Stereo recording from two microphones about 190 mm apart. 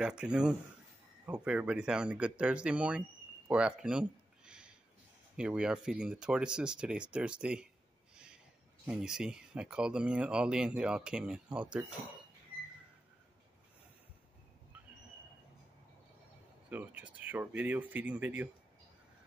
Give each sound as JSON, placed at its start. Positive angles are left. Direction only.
{"t": 0.0, "sound": "speech", "side_deg": -5}
{"t": 3.4, "sound": "a sound", "side_deg": -5}
{"t": 5.3, "sound": "speech", "side_deg": -5}
{"t": 8.8, "sound": "speech", "side_deg": -5}
{"t": 16.7, "sound": "speech", "side_deg": -10}